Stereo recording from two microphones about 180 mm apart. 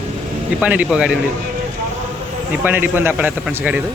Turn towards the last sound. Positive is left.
turn(degrees=-10)  # may be behind; listen again after turning